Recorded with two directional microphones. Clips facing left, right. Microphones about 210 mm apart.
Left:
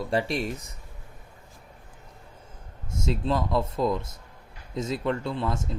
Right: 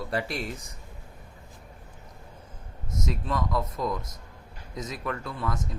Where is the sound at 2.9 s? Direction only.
30° left (ahead or behind).